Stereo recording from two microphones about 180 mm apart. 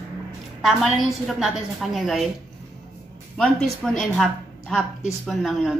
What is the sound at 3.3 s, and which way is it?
A woman's voice, 5° left (ahead or behind).